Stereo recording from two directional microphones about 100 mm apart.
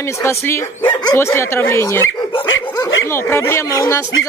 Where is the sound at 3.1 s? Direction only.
25° left (ahead or behind).